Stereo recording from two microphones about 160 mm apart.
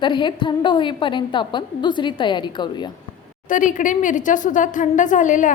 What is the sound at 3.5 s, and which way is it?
A woman's voice, 55° left (ahead or behind).